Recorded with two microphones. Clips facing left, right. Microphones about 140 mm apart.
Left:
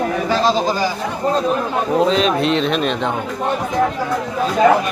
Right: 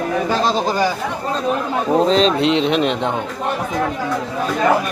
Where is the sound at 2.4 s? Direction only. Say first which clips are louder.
Right 1 dB; 20° right (ahead or behind).